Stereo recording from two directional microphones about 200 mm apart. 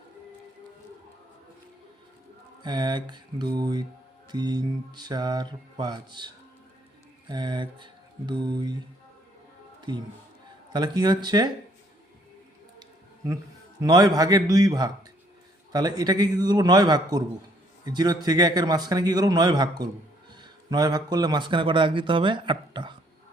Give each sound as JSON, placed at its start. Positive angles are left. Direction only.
{"t": 2.6, "sound": "speech", "side_deg": -20}
{"t": 10.7, "sound": "speech", "side_deg": -20}
{"t": 12.8, "sound": "a man's voice", "side_deg": -15}